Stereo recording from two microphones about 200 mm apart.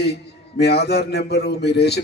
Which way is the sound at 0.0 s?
55° left (ahead or behind).